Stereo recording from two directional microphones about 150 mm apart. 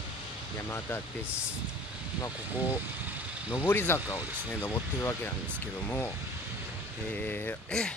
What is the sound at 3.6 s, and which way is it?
Speech, 15° left (ahead or behind).